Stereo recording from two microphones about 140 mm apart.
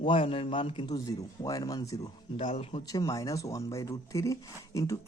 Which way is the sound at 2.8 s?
25° left (ahead or behind).